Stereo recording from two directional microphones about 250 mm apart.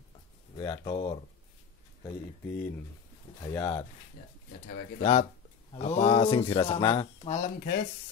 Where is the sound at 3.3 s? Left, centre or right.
Centre.